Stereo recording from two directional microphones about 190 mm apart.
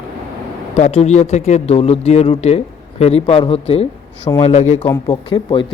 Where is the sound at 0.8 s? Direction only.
35° left (ahead or behind).